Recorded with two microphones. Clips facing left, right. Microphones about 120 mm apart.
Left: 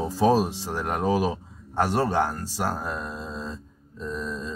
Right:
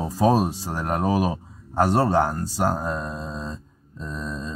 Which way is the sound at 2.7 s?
25° right (ahead or behind).